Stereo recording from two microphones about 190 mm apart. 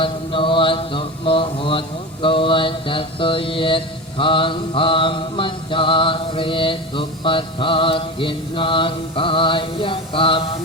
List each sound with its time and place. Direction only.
0.0 s mantra: 25° left (ahead or behind)